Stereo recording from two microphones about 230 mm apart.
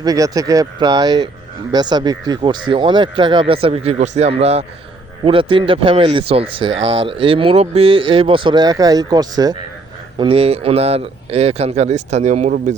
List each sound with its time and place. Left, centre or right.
0.0 s speech: centre; by 12.7 s right